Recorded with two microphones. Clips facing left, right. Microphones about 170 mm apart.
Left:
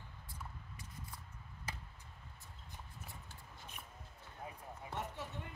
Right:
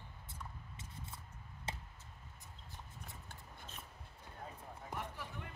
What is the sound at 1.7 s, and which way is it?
Chop, 25° right (ahead or behind).